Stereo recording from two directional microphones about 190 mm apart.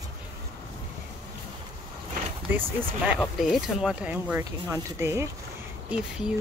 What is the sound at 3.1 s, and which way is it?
Speech, centre (ahead or behind).